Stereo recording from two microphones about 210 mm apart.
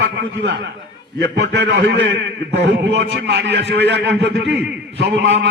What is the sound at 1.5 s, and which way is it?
A man's voice, 55° right (ahead or behind).